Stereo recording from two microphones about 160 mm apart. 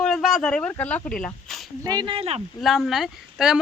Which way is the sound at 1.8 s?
25° right (ahead or behind).